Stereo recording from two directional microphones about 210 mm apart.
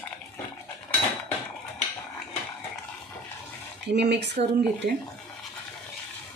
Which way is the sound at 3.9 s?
50° right (ahead or behind).